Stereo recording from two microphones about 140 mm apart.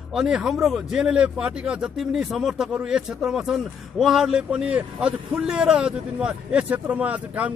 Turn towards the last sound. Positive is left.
turn(degrees=-10)  # may be behind; listen again after turning